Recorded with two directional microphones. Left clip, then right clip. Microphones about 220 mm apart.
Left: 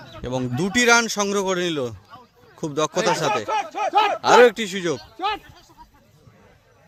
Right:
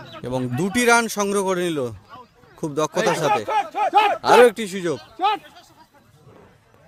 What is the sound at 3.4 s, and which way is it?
Speech, 50° right (ahead or behind).